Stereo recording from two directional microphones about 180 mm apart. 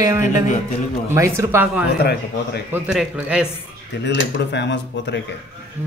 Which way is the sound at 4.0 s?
75° left (ahead or behind).